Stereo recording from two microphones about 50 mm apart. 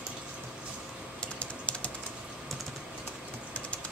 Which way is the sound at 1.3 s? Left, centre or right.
Left.